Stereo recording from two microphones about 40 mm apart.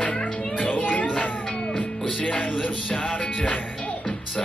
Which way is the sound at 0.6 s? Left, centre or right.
Left.